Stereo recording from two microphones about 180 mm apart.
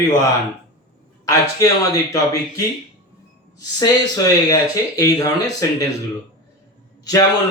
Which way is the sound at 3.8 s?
20° left (ahead or behind).